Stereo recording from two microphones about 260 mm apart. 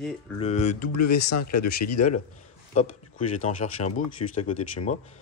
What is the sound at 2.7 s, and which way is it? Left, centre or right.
Speech, left.